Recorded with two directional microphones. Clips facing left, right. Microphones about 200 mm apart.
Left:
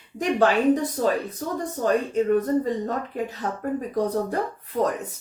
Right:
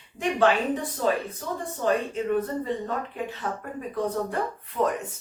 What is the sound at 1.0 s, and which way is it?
Speech, 40° left (ahead or behind).